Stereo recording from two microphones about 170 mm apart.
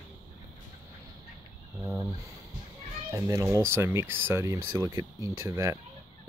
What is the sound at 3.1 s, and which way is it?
Speech, 20° right (ahead or behind).